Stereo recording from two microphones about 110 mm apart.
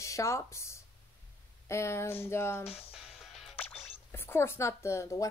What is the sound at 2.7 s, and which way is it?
Music, 65° left (ahead or behind).